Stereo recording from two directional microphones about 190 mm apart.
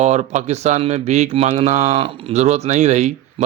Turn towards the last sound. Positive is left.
turn(degrees=-35)  # may be behind; listen again after turning